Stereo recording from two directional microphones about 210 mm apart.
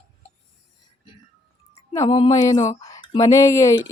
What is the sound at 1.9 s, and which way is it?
Music, 20° left (ahead or behind).